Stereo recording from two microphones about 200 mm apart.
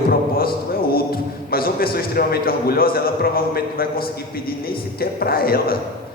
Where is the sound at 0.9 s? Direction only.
50° left (ahead or behind).